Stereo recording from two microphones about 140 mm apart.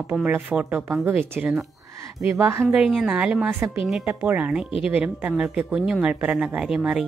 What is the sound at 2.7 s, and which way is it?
Speech, centre (ahead or behind).